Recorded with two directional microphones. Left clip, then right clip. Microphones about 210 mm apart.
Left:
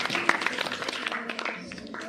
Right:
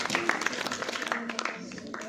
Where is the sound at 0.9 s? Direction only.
45° left (ahead or behind).